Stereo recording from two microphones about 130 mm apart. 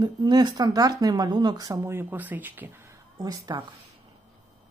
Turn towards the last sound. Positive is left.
turn(degrees=-30)  # may be behind; listen again after turning